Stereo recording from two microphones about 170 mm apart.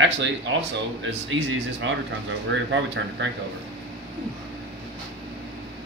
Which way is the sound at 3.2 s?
90° right.